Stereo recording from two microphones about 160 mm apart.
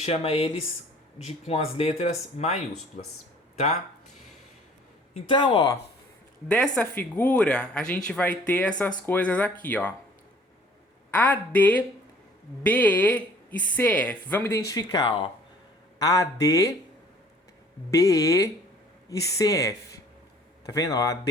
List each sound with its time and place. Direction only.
0.0 s speech: 40° left (ahead or behind)
5.1 s speech: 30° left (ahead or behind)
6.7 s a woman's voice: 10° left (ahead or behind)
11.1 s a woman's voice: 10° left (ahead or behind)
17.9 s speech: 20° left (ahead or behind)